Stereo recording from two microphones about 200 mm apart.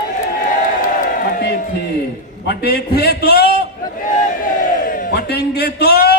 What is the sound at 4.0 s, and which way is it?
Battle cry, 40° left (ahead or behind).